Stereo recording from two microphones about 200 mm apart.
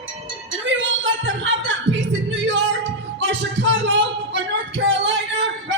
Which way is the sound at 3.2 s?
65° right (ahead or behind).